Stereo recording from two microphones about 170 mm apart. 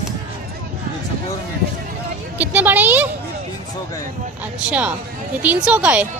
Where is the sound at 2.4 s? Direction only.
10° right (ahead or behind).